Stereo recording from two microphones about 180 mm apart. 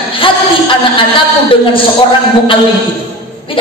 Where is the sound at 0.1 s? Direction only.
30° left (ahead or behind).